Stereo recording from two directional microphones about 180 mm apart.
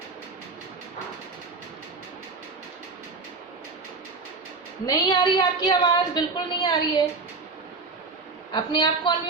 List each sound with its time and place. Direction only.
4.9 s a woman's voice: 20° left (ahead or behind)
8.5 s a woman's voice: 25° left (ahead or behind)